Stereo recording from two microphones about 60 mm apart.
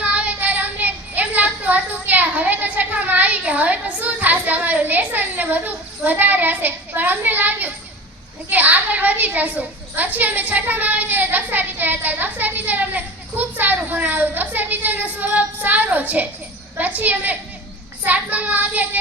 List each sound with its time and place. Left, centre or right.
0.0 s child singing: right
8.4 s a child's voice: right